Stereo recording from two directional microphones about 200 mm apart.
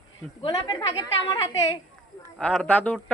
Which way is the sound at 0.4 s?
20° left (ahead or behind).